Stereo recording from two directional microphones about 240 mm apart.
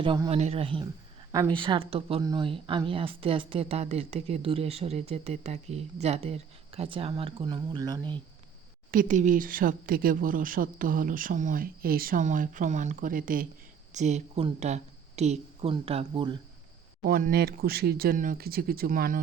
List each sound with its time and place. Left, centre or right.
0.0 s speech: right
8.9 s speech: right
17.1 s speech: right